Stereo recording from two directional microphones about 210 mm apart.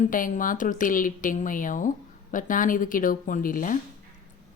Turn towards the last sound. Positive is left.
turn(degrees=40)  # may be behind; listen again after turning